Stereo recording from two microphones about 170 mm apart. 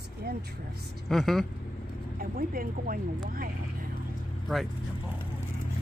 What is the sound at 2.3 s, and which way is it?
Speech, 55° right (ahead or behind).